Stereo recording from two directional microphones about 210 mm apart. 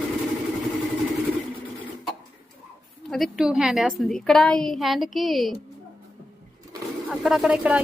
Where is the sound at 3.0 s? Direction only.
Centre (ahead or behind).